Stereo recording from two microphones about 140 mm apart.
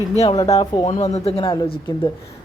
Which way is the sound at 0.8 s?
50° left (ahead or behind).